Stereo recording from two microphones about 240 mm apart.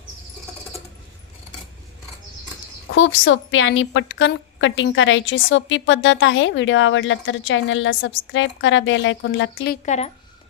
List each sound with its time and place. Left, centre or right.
2.9 s a woman's voice: left
9.8 s a woman's voice: left